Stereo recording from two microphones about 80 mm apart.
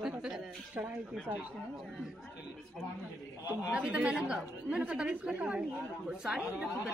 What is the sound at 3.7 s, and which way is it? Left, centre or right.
Speech, centre.